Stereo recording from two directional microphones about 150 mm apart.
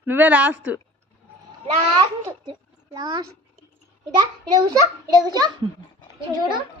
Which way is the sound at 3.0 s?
25° right (ahead or behind).